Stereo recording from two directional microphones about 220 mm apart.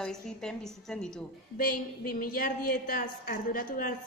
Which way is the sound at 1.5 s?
40° left (ahead or behind).